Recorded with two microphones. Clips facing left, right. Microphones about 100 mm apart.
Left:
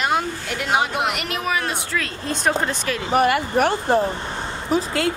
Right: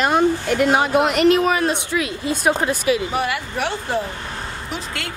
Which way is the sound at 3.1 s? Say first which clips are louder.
Left 5 dB; 50° left (ahead or behind).